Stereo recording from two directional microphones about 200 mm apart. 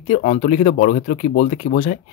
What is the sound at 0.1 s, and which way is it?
Speech, 40° left (ahead or behind).